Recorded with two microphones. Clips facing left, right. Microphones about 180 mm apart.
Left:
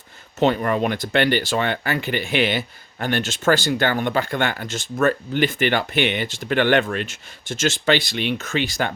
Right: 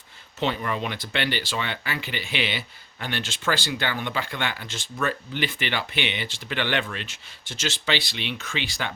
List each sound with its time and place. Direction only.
0.3 s speech: 50° left (ahead or behind)